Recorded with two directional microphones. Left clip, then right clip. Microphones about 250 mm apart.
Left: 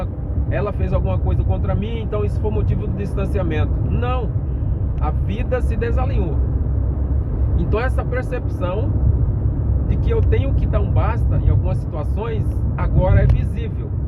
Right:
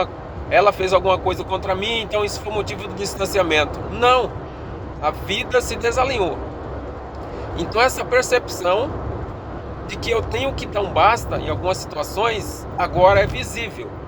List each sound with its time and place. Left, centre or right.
0.5 s speech: right
7.8 s speech: right
10.1 s speech: right